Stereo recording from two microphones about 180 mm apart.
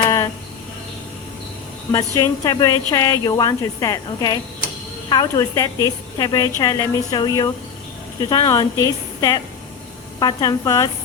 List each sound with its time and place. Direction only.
2.1 s a woman's voice: 20° left (ahead or behind)